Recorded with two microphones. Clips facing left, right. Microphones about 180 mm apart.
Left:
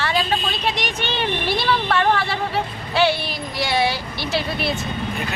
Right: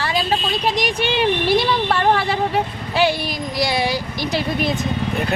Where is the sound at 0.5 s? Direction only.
40° right (ahead or behind).